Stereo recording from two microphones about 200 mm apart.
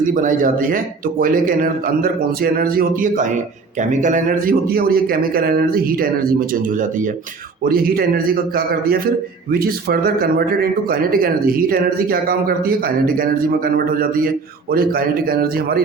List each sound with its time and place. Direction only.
0.0 s a man's voice: 40° right (ahead or behind)